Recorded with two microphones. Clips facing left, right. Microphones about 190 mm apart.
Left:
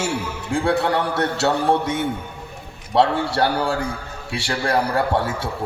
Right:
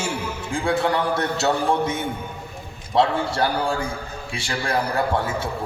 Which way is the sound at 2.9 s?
70° left (ahead or behind).